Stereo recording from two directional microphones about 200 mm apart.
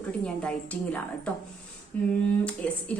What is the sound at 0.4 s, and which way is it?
A woman's voice, 5° left (ahead or behind).